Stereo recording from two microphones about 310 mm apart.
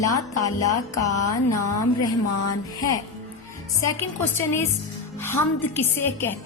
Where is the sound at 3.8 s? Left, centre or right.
Centre.